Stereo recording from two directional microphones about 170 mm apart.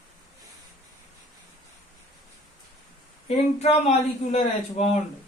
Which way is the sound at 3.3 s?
40° left (ahead or behind).